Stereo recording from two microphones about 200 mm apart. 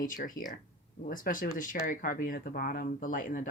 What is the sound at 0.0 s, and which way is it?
Speech, 40° left (ahead or behind).